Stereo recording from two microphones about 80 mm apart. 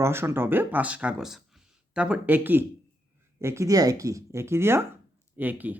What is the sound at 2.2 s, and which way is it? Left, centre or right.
Speech, right.